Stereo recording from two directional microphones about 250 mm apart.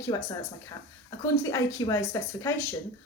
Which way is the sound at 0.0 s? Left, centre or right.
Centre.